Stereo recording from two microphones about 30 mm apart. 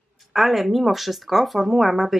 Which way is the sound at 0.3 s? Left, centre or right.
Centre.